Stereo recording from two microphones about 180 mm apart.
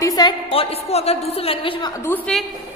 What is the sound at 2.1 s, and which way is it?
Speech, 5° left (ahead or behind).